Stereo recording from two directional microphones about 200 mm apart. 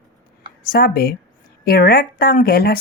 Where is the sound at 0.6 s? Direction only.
45° left (ahead or behind).